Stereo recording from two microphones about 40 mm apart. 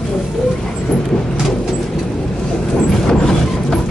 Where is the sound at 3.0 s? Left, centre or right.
Centre.